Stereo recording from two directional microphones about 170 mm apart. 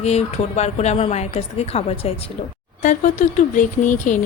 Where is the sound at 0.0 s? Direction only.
40° left (ahead or behind).